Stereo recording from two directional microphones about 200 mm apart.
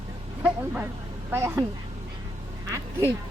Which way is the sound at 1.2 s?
15° right (ahead or behind).